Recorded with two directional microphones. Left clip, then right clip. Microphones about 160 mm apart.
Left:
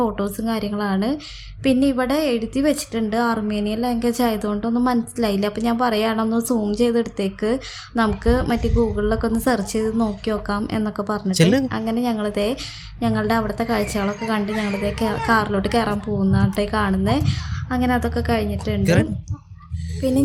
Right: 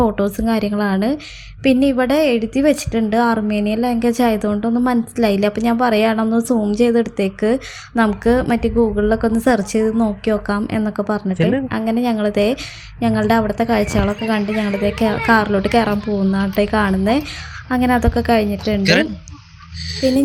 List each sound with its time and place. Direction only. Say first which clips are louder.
0.0 s a woman's voice: right 5 dB; 15° right (ahead or behind)
18.8 s a woman's voice: right 5 dB; 20° left (ahead or behind)